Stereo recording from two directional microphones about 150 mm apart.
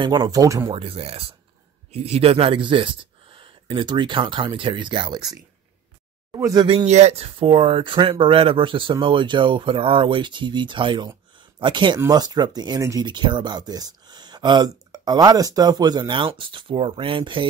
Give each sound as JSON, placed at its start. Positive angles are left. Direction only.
{"t": 0.0, "sound": "speech", "side_deg": -25}
{"t": 0.7, "sound": "speech", "side_deg": -40}
{"t": 6.9, "sound": "speech", "side_deg": -45}